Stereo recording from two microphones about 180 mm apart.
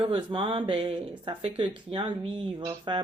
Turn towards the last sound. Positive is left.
turn(degrees=-25)  # may be behind; listen again after turning